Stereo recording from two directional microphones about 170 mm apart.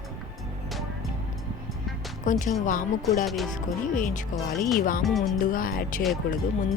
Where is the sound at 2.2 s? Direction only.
50° left (ahead or behind).